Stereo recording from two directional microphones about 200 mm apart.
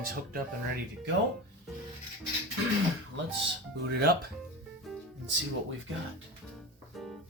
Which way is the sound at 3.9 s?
50° right (ahead or behind).